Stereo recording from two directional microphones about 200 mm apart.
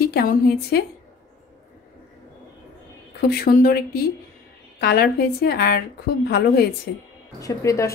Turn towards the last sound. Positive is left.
turn(degrees=15)  # may be behind; listen again after turning